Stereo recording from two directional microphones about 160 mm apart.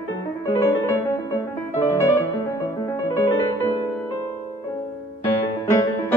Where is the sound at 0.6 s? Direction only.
15° left (ahead or behind).